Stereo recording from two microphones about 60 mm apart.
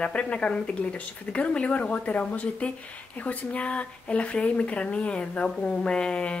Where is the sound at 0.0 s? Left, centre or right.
Left.